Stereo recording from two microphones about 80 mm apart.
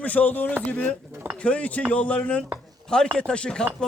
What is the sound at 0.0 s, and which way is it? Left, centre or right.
A man's voice, centre.